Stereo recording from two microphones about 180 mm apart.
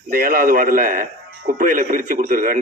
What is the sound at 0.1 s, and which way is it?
A man's voice, 55° right (ahead or behind).